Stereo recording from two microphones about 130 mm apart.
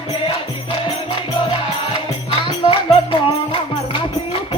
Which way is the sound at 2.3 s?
45° left (ahead or behind).